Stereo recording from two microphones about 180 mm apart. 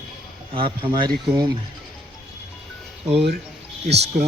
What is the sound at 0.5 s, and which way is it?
Speech, 30° right (ahead or behind).